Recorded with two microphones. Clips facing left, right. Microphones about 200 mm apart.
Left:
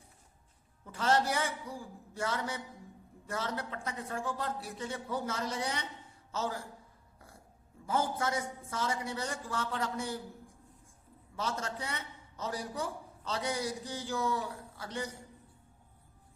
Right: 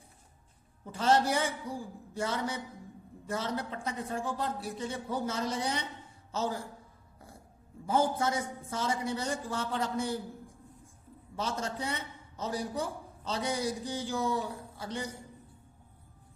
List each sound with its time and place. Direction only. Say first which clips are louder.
0.9 s a man's voice: right 3 dB; 25° right (ahead or behind)
7.9 s a man's voice: right 4 dB; 20° right (ahead or behind)
11.3 s a man's voice: right 2 dB; 25° right (ahead or behind)